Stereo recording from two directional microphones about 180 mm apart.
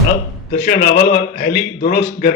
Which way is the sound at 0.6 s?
55° left (ahead or behind).